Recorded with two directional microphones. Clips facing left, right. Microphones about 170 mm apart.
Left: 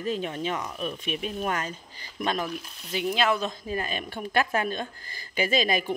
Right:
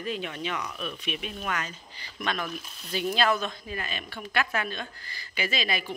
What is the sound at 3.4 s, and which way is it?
Speech, 35° left (ahead or behind).